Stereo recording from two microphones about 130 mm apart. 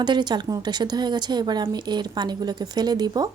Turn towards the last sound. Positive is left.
turn(degrees=-30)  # may be behind; listen again after turning